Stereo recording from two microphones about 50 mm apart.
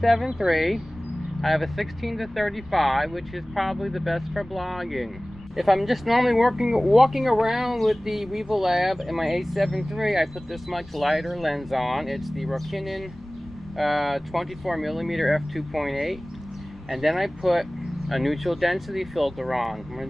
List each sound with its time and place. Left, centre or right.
0.0 s speech: centre